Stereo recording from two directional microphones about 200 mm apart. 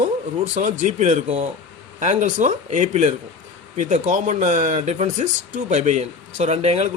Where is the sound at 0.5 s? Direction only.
40° right (ahead or behind).